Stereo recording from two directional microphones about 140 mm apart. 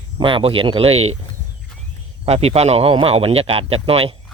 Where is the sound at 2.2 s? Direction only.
50° right (ahead or behind).